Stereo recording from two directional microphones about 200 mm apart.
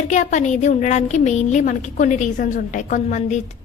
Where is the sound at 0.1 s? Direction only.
40° left (ahead or behind).